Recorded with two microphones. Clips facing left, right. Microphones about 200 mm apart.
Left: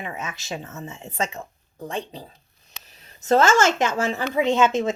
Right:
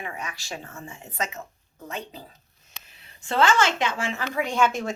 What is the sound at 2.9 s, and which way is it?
Speech, 40° left (ahead or behind).